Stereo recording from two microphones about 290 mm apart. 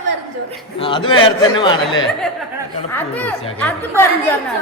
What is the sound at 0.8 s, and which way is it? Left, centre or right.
A man's voice, centre.